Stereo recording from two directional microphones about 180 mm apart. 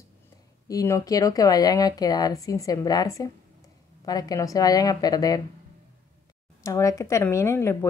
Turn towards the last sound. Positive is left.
turn(degrees=15)  # may be behind; listen again after turning